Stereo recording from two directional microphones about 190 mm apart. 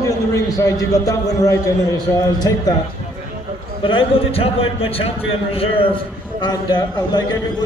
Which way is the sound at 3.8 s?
25° left (ahead or behind).